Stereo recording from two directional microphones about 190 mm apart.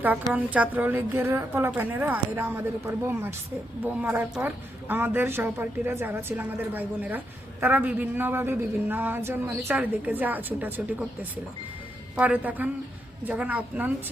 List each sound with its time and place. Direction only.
0.3 s speech: 10° right (ahead or behind)